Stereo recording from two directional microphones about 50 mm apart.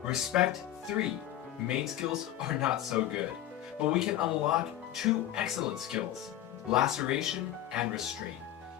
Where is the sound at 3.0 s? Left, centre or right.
Right.